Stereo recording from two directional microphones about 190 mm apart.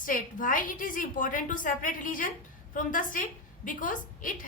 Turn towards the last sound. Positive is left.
turn(degrees=45)  # may be behind; listen again after turning